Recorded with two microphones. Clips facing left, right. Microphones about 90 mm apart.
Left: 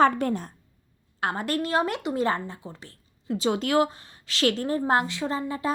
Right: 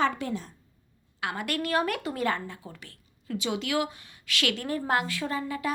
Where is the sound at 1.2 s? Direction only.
35° left (ahead or behind).